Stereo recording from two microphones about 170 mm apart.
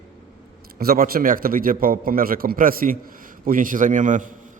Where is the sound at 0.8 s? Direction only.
60° right (ahead or behind).